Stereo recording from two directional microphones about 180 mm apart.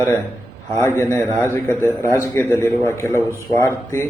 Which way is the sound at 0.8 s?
20° left (ahead or behind).